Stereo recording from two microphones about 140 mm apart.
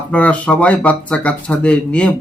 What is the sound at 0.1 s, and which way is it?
A man's voice, 10° left (ahead or behind).